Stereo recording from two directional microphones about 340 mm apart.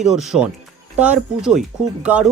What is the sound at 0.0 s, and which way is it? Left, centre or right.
Speech, centre.